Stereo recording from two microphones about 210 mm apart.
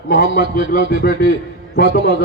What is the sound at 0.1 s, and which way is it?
A man's voice, 50° left (ahead or behind).